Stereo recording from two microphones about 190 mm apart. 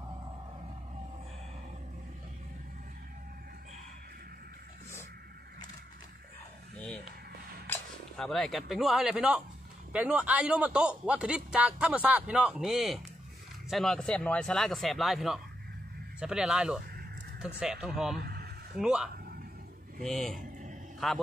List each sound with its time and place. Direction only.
7.6 s a man's voice: 5° left (ahead or behind)
18.2 s a sound: 55° right (ahead or behind)
18.8 s speech: 5° right (ahead or behind)